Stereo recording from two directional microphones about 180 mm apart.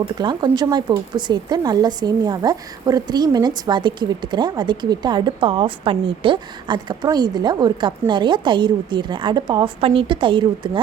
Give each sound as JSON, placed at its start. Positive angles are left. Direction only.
{"t": 0.0, "sound": "speech", "side_deg": -25}